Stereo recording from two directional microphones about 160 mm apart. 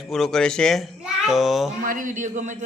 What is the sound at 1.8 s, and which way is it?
Speech, 55° right (ahead or behind).